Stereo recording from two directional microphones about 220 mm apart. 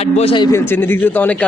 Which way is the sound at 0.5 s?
10° left (ahead or behind).